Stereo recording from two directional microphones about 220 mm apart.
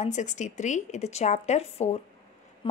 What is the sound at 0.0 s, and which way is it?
A woman's voice, 35° left (ahead or behind).